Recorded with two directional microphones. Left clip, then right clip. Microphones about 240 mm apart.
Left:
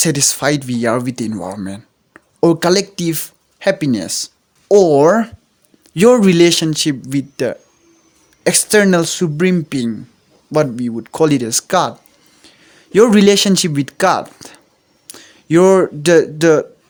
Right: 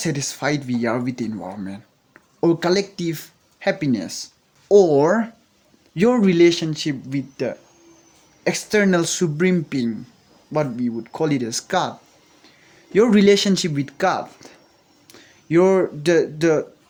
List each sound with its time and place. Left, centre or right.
0.0 s speech: left
10.5 s speech: left